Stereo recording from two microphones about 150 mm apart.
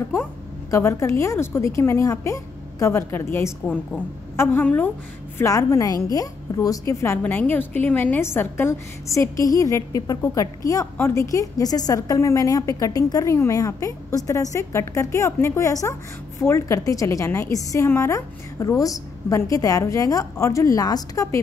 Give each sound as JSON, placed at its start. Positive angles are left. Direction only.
{"t": 0.7, "sound": "a woman's voice", "side_deg": 20}